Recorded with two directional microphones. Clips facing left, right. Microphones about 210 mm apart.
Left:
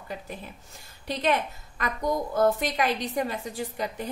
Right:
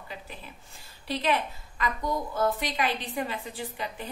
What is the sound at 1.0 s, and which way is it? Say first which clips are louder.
A woman's voice: left 2 dB; 45° left (ahead or behind).